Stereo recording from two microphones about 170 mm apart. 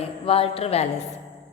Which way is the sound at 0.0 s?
35° left (ahead or behind).